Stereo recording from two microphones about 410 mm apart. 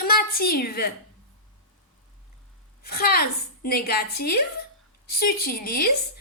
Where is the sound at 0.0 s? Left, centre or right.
Left.